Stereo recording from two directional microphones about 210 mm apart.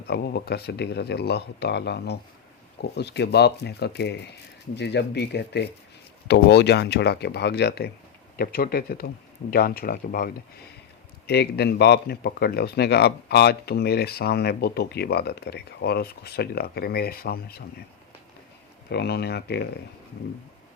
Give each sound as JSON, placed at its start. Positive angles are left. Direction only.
{"t": 0.1, "sound": "speech", "side_deg": 50}
{"t": 18.9, "sound": "speech", "side_deg": 50}